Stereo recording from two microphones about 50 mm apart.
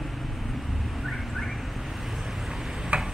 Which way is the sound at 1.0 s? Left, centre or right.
Centre.